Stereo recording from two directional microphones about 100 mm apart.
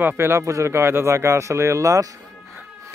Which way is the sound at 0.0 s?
20° right (ahead or behind).